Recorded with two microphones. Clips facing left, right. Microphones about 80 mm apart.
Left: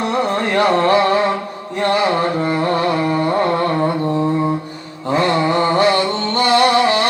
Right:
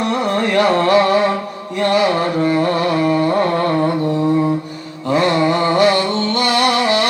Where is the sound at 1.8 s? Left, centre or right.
Left.